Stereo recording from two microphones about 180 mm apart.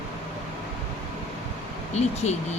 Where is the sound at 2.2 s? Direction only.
40° left (ahead or behind).